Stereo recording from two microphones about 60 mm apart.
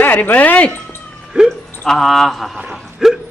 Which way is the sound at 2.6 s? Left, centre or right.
Centre.